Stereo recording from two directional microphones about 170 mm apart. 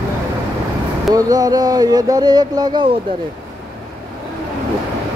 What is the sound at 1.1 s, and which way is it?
Speech, 20° right (ahead or behind).